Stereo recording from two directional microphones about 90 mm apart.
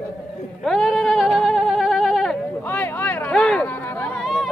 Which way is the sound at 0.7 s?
Centre (ahead or behind).